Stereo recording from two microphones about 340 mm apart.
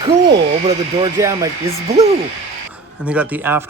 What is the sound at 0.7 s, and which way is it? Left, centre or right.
Speech, centre.